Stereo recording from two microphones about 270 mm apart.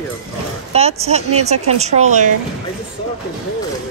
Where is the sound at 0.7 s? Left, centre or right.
Right.